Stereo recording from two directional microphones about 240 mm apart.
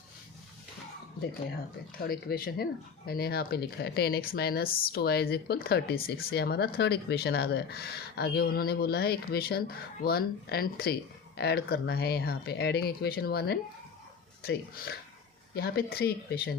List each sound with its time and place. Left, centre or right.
1.3 s speech: left